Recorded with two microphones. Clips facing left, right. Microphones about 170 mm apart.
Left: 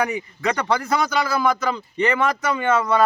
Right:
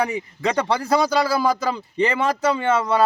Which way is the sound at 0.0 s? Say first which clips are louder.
Even; 30° right (ahead or behind).